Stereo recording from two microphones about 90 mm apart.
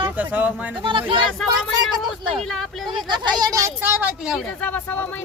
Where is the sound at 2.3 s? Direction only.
5° left (ahead or behind).